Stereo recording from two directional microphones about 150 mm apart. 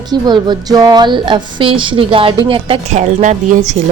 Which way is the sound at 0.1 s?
30° right (ahead or behind).